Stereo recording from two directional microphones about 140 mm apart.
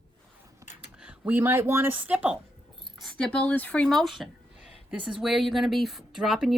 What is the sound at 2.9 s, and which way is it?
Speech, 5° left (ahead or behind).